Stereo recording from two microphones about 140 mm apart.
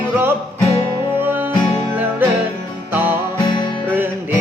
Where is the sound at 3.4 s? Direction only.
35° left (ahead or behind).